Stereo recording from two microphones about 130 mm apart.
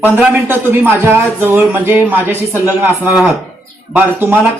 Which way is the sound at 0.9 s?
15° right (ahead or behind).